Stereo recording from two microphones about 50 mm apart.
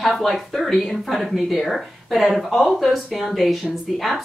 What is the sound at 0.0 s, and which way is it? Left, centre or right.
Speech, centre.